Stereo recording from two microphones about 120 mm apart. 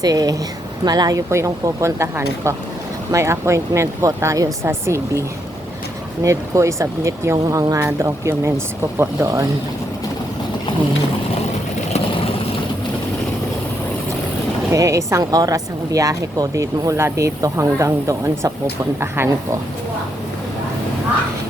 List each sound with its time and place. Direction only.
0.0 s a woman's voice: 35° right (ahead or behind)
6.2 s a woman's voice: 25° right (ahead or behind)
11.9 s vehicle: 55° left (ahead or behind)
14.7 s a woman's voice: 25° right (ahead or behind)